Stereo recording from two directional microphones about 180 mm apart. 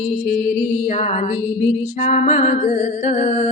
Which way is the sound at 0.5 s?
40° left (ahead or behind).